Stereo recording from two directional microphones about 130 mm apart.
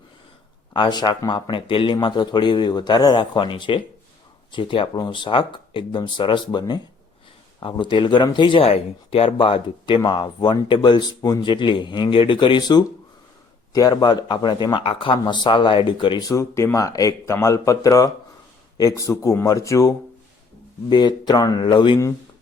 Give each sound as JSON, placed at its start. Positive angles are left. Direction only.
{"t": 0.7, "sound": "speech", "side_deg": 35}
{"t": 16.3, "sound": "speech", "side_deg": 25}
{"t": 20.9, "sound": "speech", "side_deg": 35}